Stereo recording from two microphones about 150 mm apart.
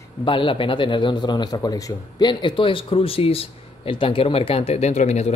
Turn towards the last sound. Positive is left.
turn(degrees=50)  # may be behind; listen again after turning